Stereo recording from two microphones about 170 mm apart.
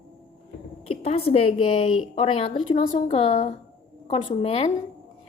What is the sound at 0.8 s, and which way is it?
A woman's voice, 35° left (ahead or behind).